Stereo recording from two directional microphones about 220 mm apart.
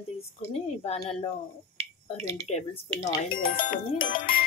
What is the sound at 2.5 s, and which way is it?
Speech, 30° left (ahead or behind).